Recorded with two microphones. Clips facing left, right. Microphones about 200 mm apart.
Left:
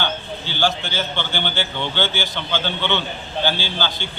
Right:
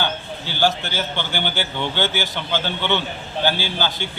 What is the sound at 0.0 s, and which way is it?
A man's voice, 10° right (ahead or behind).